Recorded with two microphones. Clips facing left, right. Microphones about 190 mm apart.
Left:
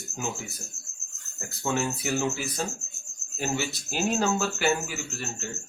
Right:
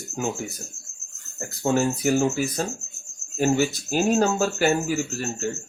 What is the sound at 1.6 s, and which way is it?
Speech, 45° right (ahead or behind).